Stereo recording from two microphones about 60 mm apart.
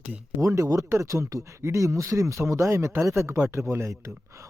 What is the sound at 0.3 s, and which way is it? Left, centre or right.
Speech, right.